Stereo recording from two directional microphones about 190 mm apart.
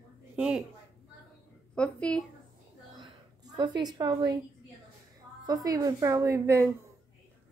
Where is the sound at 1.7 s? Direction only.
5° left (ahead or behind).